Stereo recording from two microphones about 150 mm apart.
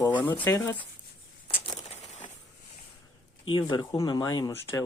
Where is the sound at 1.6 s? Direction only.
30° left (ahead or behind).